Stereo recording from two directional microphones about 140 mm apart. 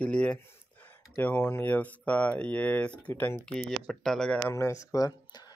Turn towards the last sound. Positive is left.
turn(degrees=30)  # may be behind; listen again after turning